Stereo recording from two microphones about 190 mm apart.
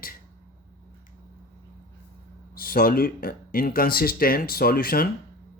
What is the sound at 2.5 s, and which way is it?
Speech, 50° left (ahead or behind).